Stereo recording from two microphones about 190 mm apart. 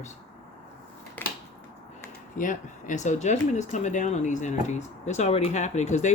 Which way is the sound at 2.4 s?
45° left (ahead or behind).